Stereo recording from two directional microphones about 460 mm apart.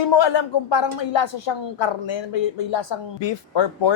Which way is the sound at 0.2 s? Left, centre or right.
Left.